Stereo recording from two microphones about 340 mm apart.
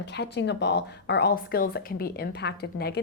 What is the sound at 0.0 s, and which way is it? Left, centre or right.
Speech, left.